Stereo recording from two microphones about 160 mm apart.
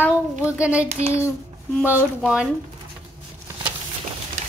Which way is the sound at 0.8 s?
45° right (ahead or behind).